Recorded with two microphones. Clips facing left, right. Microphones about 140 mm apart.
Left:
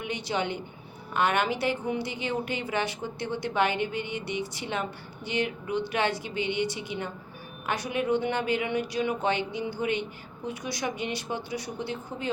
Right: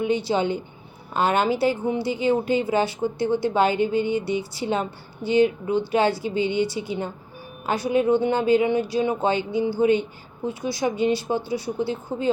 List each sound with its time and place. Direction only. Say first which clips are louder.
0.0 s a woman's voice: right 8 dB; 30° right (ahead or behind)